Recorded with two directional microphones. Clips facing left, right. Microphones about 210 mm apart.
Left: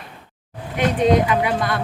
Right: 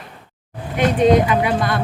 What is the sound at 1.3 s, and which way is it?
Music, 25° right (ahead or behind).